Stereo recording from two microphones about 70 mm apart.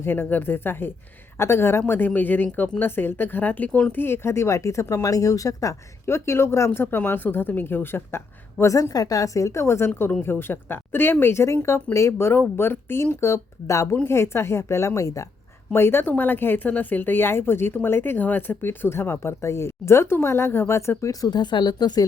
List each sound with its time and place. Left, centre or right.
0.0 s speech: left
1.9 s speech: left
3.9 s speech: left
8.6 s speech: left
13.9 s speech: left
15.7 s speech: left
21.0 s speech: left